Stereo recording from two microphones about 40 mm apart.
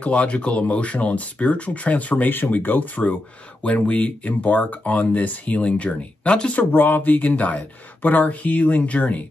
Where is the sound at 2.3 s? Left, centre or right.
Left.